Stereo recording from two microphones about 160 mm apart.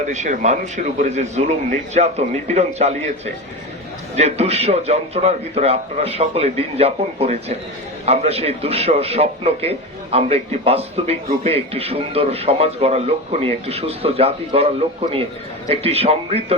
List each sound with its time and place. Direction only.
0.0 s a man's voice: 50° right (ahead or behind)
4.1 s a man's voice: 40° right (ahead or behind)